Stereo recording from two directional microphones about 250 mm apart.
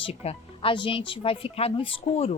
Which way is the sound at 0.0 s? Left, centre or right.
Left.